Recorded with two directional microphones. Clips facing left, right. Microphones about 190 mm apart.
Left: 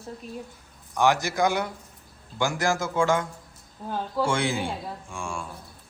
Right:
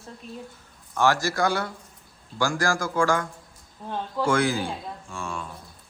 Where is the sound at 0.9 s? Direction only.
20° left (ahead or behind).